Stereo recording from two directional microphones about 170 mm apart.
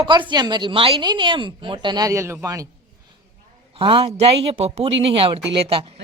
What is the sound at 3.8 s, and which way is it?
Speech, 30° right (ahead or behind).